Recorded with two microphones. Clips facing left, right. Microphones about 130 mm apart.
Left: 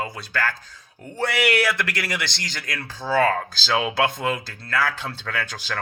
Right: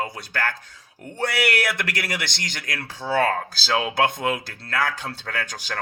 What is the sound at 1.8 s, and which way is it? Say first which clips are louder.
Speech: left 1 dB; 50° right (ahead or behind).